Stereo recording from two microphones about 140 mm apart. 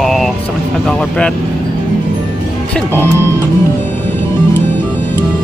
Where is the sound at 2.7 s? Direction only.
15° left (ahead or behind).